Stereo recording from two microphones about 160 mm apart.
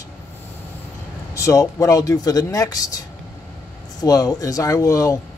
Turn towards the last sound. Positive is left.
turn(degrees=20)  # may be behind; listen again after turning